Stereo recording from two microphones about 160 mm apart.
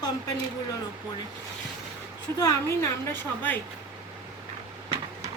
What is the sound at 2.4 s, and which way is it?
A woman's voice, 20° left (ahead or behind).